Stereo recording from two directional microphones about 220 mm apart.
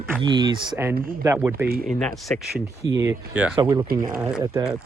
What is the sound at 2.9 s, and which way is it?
Speech, 15° right (ahead or behind).